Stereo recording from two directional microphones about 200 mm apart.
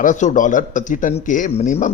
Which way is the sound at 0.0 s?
35° left (ahead or behind).